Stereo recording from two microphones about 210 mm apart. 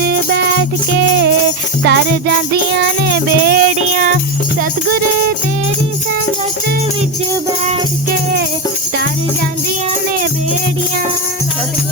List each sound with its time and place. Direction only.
0.1 s music: 50° right (ahead or behind)
1.8 s music: 50° right (ahead or behind)